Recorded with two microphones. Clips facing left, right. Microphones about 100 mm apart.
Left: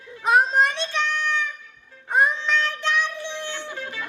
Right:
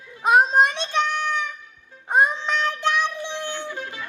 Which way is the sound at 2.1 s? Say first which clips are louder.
Right 1 dB; 20° right (ahead or behind).